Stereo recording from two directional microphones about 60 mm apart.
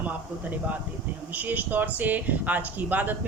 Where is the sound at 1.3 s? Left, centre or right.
Right.